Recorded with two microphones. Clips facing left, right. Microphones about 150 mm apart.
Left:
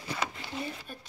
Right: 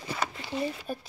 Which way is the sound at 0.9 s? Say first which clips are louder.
Right 10 dB; 40° right (ahead or behind).